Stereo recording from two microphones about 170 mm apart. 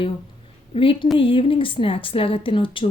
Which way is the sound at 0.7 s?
30° left (ahead or behind).